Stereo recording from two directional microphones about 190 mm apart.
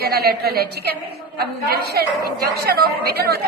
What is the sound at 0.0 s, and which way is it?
A woman's voice, 55° right (ahead or behind).